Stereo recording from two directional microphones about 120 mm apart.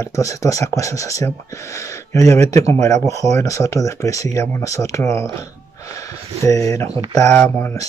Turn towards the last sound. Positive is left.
turn(degrees=20)  # may be behind; listen again after turning